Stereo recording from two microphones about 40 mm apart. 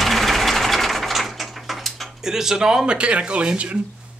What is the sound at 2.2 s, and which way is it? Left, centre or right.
Speech, centre.